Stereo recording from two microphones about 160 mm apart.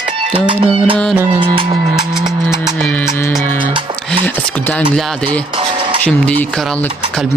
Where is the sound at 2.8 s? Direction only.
10° left (ahead or behind).